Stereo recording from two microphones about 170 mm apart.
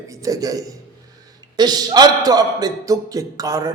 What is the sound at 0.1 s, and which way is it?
A man's voice, 20° right (ahead or behind).